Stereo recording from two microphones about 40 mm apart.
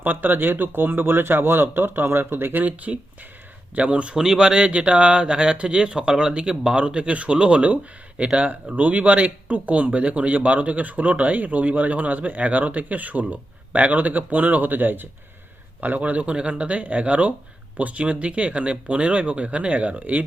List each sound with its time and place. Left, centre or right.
0.0 s speech: right
2.6 s speech: right
4.2 s speech: centre; by 15.0 s right
15.8 s speech: right